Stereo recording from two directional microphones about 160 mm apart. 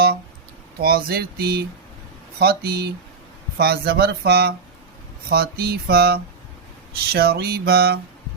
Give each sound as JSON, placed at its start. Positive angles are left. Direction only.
{"t": 0.8, "sound": "speech", "side_deg": -70}